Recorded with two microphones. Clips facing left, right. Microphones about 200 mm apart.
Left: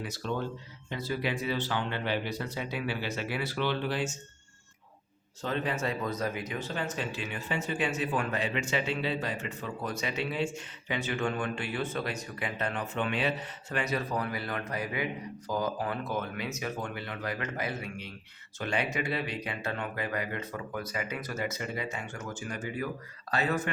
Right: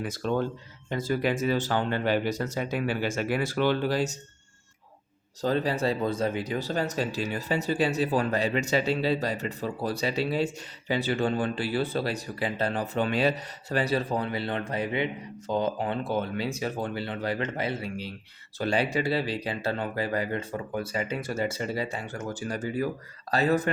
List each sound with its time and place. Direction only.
0.0 s speech: 50° right (ahead or behind)
5.4 s speech: 35° right (ahead or behind)